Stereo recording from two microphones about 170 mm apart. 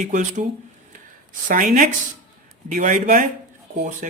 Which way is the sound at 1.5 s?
50° right (ahead or behind).